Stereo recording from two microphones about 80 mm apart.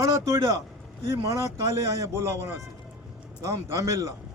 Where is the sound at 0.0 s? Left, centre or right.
Right.